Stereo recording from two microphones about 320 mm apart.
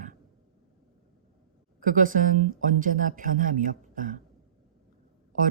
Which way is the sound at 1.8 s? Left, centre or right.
Right.